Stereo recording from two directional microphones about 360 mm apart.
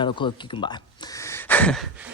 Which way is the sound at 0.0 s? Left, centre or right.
Centre.